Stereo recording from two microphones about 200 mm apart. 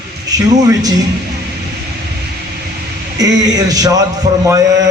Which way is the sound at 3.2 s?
20° right (ahead or behind).